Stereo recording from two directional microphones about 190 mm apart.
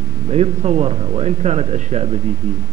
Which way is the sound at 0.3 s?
35° right (ahead or behind).